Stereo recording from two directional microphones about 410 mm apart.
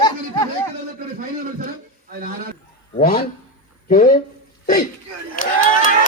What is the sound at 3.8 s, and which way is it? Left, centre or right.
Speech, centre.